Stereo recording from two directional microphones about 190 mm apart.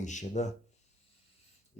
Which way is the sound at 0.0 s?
40° left (ahead or behind).